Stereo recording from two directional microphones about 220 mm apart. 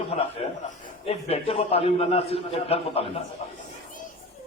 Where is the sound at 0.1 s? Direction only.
30° left (ahead or behind).